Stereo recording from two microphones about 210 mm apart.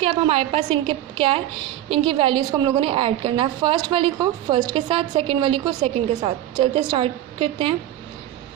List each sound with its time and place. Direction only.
0.0 s a woman's voice: 25° right (ahead or behind)